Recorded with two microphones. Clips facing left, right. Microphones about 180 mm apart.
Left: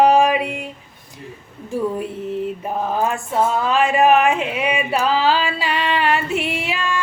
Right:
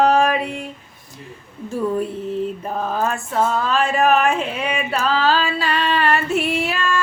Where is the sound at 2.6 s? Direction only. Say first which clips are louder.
Left 1 dB; 15° left (ahead or behind).